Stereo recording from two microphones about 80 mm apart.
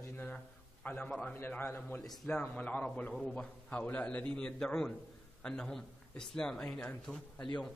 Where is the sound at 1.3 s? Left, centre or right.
Left.